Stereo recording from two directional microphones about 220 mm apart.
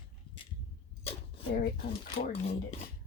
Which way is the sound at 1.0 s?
25° left (ahead or behind).